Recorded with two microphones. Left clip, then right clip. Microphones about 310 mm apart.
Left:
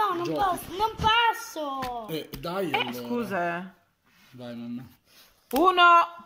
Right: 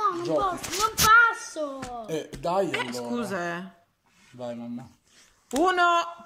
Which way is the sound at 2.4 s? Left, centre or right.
Centre.